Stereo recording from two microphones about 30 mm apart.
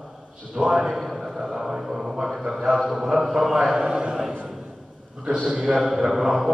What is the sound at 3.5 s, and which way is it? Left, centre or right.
Speech, centre.